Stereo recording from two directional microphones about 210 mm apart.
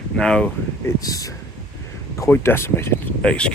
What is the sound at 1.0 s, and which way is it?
Speech, 15° left (ahead or behind).